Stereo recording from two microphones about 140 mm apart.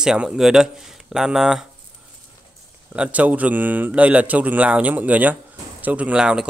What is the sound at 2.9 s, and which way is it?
A man's voice, 10° right (ahead or behind).